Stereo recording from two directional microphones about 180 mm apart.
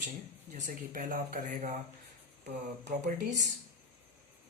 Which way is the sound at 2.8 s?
40° right (ahead or behind).